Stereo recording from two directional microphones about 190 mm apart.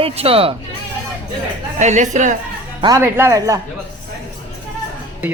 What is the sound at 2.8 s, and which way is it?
Speech, 15° right (ahead or behind).